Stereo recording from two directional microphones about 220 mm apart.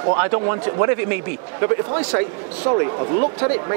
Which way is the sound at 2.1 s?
30° right (ahead or behind).